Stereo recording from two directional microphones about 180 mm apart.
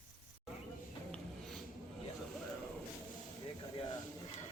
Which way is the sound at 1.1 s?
Centre (ahead or behind).